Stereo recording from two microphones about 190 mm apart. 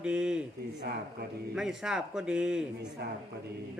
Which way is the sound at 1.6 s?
5° right (ahead or behind).